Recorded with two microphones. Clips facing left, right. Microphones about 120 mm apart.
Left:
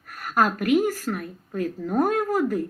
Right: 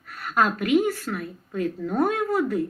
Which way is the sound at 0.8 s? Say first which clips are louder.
Left 1 dB; 45° left (ahead or behind).